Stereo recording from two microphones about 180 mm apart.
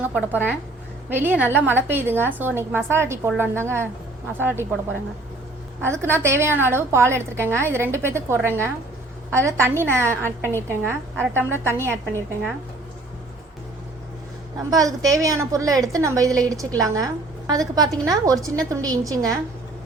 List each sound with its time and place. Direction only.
0.0 s a woman's voice: 10° right (ahead or behind)
5.8 s a woman's voice: 15° right (ahead or behind)
14.7 s a woman's voice: 20° right (ahead or behind)